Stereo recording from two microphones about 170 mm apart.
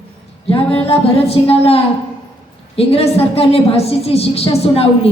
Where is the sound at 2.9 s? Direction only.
35° left (ahead or behind).